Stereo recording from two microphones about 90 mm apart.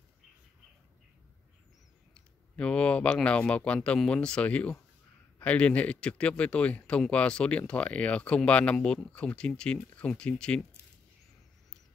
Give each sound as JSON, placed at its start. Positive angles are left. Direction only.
{"t": 2.1, "sound": "speech", "side_deg": 10}